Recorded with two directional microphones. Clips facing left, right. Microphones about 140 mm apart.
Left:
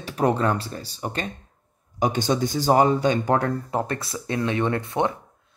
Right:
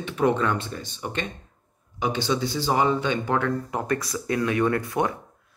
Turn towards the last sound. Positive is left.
turn(degrees=25)  # may be behind; listen again after turning